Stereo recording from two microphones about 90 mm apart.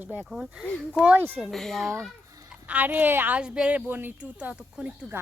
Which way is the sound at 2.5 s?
15° right (ahead or behind).